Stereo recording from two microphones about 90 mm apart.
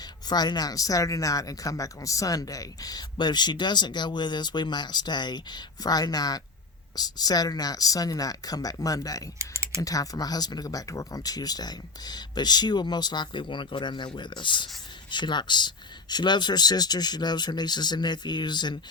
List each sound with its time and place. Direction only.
0.0 s speech: 50° left (ahead or behind)
9.4 s typing: 30° right (ahead or behind)
9.8 s speech: 40° left (ahead or behind)